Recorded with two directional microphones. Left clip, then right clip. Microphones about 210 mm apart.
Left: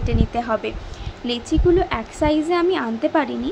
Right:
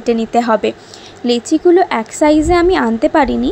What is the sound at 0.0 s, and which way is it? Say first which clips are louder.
A woman's voice: right 10 dB; 35° right (ahead or behind).